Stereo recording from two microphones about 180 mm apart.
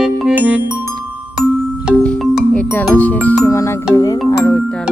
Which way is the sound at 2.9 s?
10° left (ahead or behind).